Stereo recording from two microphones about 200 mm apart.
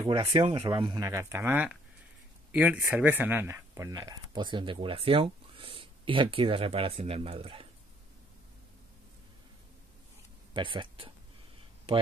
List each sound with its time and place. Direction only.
0.0 s speech: 25° right (ahead or behind)
10.5 s speech: 25° right (ahead or behind)